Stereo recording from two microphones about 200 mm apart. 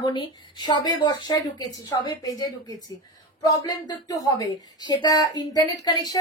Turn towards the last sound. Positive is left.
turn(degrees=20)  # may be behind; listen again after turning